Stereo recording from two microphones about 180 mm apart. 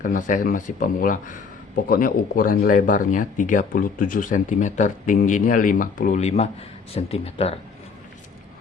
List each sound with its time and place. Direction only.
0.0 s a man's voice: 45° left (ahead or behind)